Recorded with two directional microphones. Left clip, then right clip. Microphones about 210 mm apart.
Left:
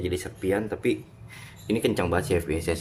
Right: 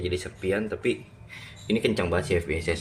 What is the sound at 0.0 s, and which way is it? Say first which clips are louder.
Speech: even; 10° left (ahead or behind).